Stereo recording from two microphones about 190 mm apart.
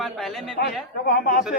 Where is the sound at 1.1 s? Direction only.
50° left (ahead or behind).